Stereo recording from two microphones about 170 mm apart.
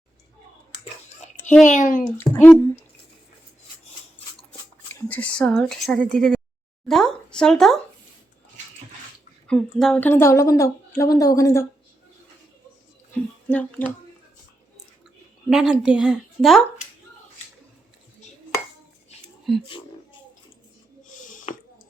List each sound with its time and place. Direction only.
1.2 s a sound: 40° left (ahead or behind)
1.6 s a child's voice: 50° left (ahead or behind)
2.1 s a woman's voice: 10° left (ahead or behind)
4.9 s speech: 10° left (ahead or behind)
9.5 s a woman's voice: 5° left (ahead or behind)
13.5 s a woman's voice: 10° left (ahead or behind)
15.4 s speech: 5° right (ahead or behind)
19.5 s speech: centre (ahead or behind)
21.1 s a sound: 50° left (ahead or behind)